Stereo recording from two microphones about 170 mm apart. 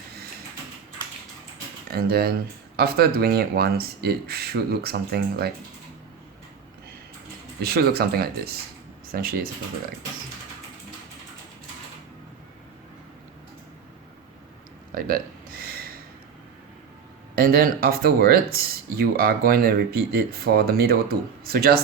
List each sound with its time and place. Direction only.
1.9 s speech: 65° right (ahead or behind)
7.6 s speech: 65° right (ahead or behind)
14.9 s a sound: 60° right (ahead or behind)
17.3 s speech: 60° right (ahead or behind)